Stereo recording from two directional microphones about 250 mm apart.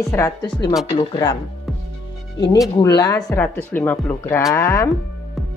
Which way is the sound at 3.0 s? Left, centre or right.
Centre.